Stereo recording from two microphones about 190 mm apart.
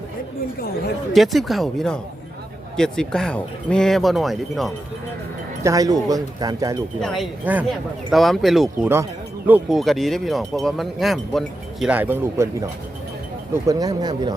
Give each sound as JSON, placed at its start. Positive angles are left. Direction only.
{"t": 1.1, "sound": "speech", "side_deg": 0}
{"t": 5.6, "sound": "speech", "side_deg": -20}
{"t": 7.0, "sound": "speech", "side_deg": 0}
{"t": 13.7, "sound": "speech", "side_deg": -20}